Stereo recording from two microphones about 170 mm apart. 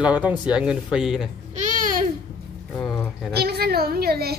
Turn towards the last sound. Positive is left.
turn(degrees=-65)  # may be behind; listen again after turning